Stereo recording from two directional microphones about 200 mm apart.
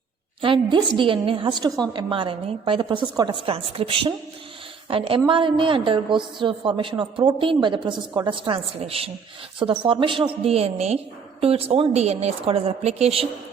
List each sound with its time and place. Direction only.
0.4 s a woman's voice: 25° right (ahead or behind)